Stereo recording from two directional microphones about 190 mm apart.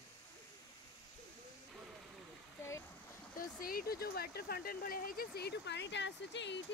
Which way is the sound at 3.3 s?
50° left (ahead or behind).